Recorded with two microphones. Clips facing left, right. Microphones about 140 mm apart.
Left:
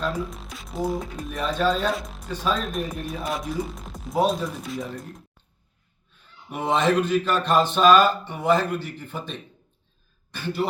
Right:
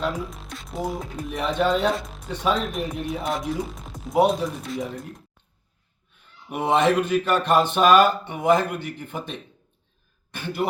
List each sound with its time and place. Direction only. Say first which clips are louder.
0.2 s speech: left 2 dB; centre (ahead or behind)
1.3 s speech: right 1 dB; 20° right (ahead or behind)
1.9 s speech: right 2 dB; centre (ahead or behind)
2.3 s speech: right 2 dB; 20° right (ahead or behind)
2.6 s speech: right 1 dB; centre (ahead or behind)
6.5 s speech: right 2 dB; 10° right (ahead or behind)
7.0 s a man's voice: right 1 dB; 55° right (ahead or behind)
7.3 s speech: right 3 dB; 15° right (ahead or behind)